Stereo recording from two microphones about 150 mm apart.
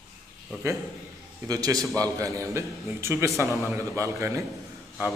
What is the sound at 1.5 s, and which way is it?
A man's voice, 25° right (ahead or behind).